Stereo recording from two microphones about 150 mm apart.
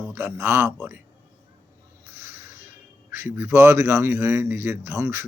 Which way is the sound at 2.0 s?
15° right (ahead or behind).